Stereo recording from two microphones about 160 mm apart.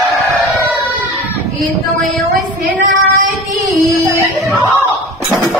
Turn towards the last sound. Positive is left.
turn(degrees=-55)  # may be behind; listen again after turning